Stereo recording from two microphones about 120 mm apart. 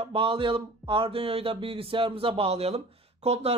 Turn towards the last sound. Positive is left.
turn(degrees=-60)  # may be behind; listen again after turning